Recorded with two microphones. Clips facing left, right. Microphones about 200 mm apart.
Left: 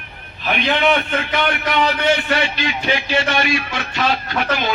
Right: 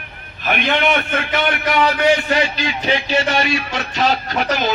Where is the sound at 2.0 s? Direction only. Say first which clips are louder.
Right 2 dB; 40° right (ahead or behind).